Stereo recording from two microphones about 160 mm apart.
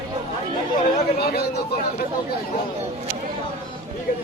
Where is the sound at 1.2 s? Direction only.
80° left.